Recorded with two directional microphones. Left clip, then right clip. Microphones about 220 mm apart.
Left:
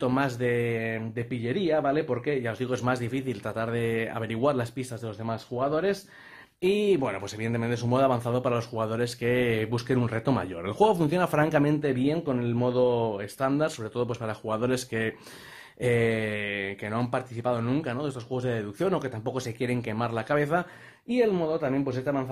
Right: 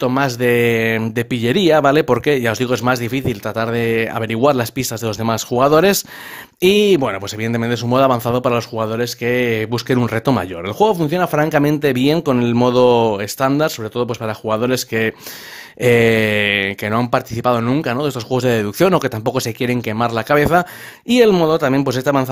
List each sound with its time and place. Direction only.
0.0 s speech: 30° right (ahead or behind)